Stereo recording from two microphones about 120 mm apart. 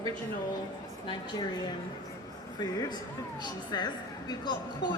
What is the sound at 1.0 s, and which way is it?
Speech, 40° left (ahead or behind).